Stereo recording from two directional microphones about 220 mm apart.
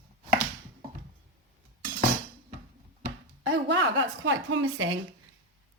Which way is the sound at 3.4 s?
55° right (ahead or behind).